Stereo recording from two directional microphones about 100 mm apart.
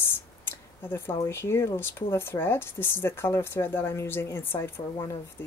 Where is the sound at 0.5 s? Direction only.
25° left (ahead or behind).